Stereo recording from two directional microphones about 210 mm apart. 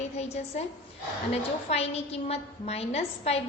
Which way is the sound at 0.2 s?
30° left (ahead or behind).